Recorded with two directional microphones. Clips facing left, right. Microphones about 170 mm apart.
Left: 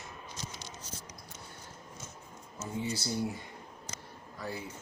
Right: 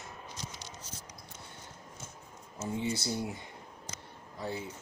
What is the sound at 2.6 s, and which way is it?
Speech, 25° right (ahead or behind).